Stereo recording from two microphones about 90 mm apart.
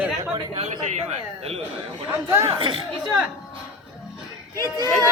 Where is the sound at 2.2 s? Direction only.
35° right (ahead or behind).